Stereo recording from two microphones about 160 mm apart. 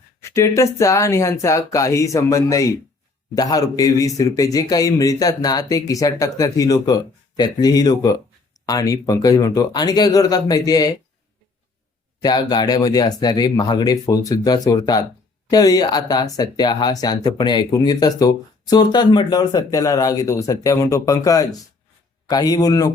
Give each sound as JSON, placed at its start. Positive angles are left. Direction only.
{"t": 0.2, "sound": "speech", "side_deg": 15}
{"t": 12.2, "sound": "speech", "side_deg": 25}